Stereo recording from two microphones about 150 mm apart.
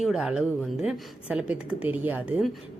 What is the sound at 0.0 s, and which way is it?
A woman's voice, 5° right (ahead or behind).